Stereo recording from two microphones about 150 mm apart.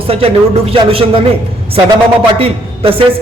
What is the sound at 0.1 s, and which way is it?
Speech, 40° right (ahead or behind).